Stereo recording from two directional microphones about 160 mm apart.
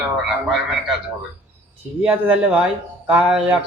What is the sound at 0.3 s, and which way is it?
Speech, centre (ahead or behind).